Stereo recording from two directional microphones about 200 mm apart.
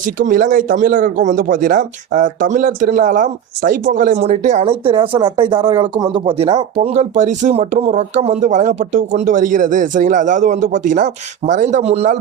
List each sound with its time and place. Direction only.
0.0 s speech: 40° right (ahead or behind)